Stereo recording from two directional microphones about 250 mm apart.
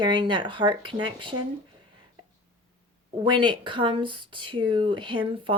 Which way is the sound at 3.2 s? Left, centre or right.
Centre.